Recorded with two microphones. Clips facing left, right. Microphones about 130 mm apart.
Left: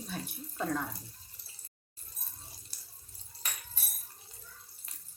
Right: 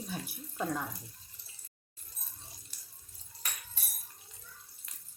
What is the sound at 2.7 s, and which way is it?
Water, 35° left (ahead or behind).